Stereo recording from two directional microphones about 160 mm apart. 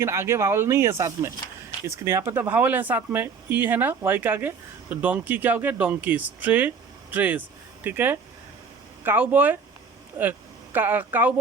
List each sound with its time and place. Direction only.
0.0 s speech: 15° right (ahead or behind)